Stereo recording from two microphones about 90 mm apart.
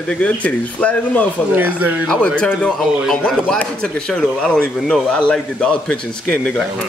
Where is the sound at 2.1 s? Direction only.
10° left (ahead or behind).